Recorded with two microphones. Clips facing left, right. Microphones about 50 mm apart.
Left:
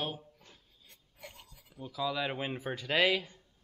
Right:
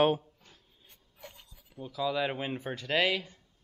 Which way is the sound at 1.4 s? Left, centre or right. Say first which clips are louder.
Right 5 dB; centre.